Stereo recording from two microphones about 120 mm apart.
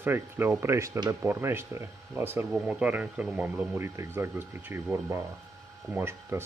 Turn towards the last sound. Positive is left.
turn(degrees=-20)  # may be behind; listen again after turning